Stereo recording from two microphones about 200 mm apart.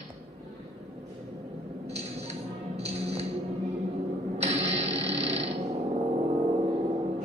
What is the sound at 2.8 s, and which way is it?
Music, 30° right (ahead or behind).